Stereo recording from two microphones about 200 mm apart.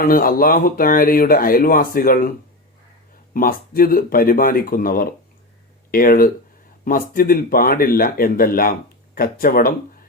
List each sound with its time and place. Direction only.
0.0 s speech: 45° left (ahead or behind)
3.3 s speech: 45° left (ahead or behind)